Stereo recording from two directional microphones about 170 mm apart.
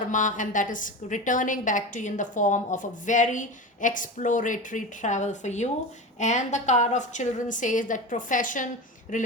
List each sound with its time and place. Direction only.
0.1 s a woman's voice: 50° left (ahead or behind)